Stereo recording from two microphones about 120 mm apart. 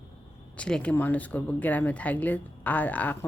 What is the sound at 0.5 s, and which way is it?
Speech, 10° left (ahead or behind).